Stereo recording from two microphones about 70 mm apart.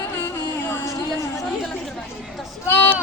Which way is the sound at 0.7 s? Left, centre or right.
Left.